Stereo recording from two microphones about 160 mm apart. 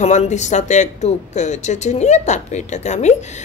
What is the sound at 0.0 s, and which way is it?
Speech, 45° left (ahead or behind).